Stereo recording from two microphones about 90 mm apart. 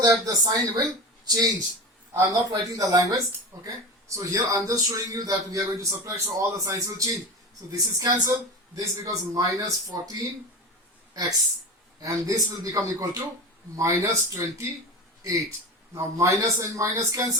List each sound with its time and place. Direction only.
0.0 s a man's voice: 45° right (ahead or behind)